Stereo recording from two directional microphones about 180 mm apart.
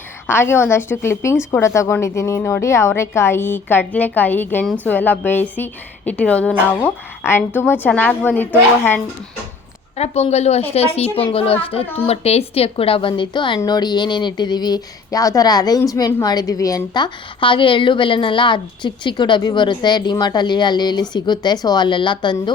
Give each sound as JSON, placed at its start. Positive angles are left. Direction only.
{"t": 0.3, "sound": "a woman's voice", "side_deg": 15}
{"t": 10.0, "sound": "a child's voice", "side_deg": 35}